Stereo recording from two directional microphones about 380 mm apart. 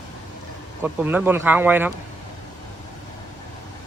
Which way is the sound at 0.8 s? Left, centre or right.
Centre.